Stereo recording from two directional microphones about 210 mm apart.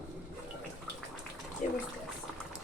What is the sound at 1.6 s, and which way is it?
Speech, 35° left (ahead or behind).